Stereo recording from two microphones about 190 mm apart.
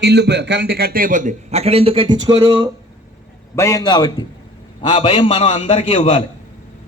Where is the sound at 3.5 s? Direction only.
15° left (ahead or behind).